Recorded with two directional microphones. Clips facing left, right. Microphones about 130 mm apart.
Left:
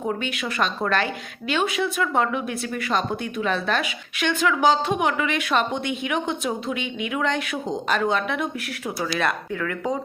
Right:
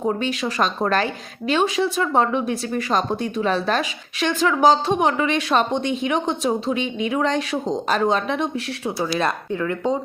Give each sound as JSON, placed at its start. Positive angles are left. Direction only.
{"t": 0.0, "sound": "a woman's voice", "side_deg": -35}